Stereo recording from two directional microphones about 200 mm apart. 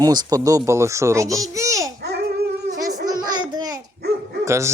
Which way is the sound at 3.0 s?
20° right (ahead or behind).